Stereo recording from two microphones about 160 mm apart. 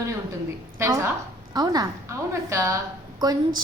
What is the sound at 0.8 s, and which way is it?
A woman's voice, 20° right (ahead or behind).